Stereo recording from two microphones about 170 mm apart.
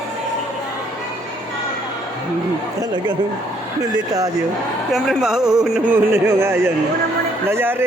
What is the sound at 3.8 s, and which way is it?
Speech, 20° right (ahead or behind).